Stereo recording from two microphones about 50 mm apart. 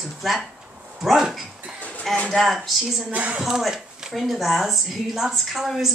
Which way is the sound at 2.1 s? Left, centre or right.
Centre.